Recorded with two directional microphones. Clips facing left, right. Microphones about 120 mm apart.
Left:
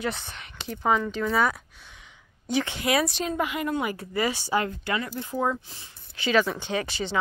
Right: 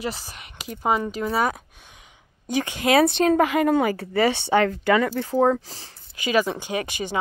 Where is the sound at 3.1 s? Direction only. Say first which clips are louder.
Right 9 dB; 60° right (ahead or behind).